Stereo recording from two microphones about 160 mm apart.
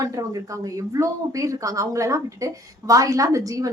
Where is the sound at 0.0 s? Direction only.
20° right (ahead or behind).